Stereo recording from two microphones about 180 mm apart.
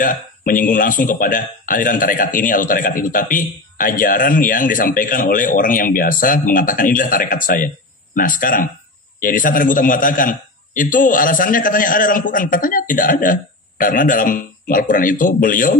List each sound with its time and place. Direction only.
0.0 s speech: 50° left (ahead or behind)